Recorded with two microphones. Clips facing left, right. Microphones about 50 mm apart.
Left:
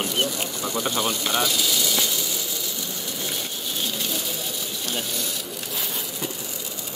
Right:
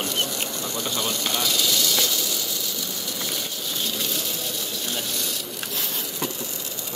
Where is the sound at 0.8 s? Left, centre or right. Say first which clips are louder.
Left 1 dB; centre.